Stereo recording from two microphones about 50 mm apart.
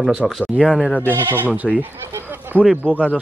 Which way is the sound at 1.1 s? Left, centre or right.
Right.